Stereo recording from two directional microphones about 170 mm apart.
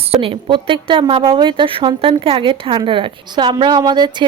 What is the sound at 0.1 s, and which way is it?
A woman's voice, 30° right (ahead or behind).